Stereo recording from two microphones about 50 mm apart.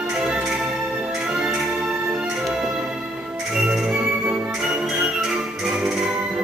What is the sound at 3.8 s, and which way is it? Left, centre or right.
Music, right.